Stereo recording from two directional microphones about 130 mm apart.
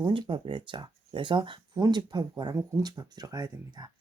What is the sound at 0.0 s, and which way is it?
Speech, 35° right (ahead or behind).